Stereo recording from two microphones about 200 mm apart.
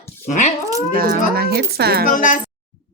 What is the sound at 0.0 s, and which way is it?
Dog, 35° left (ahead or behind).